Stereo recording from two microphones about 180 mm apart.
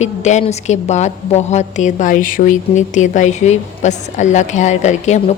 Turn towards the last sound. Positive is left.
turn(degrees=40)  # may be behind; listen again after turning